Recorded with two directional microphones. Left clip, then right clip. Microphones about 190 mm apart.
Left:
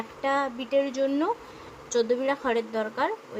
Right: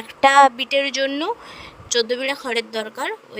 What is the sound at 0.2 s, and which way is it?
A woman's voice, 55° right (ahead or behind).